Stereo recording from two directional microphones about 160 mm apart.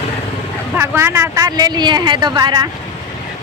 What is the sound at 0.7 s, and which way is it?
Speech, 15° right (ahead or behind).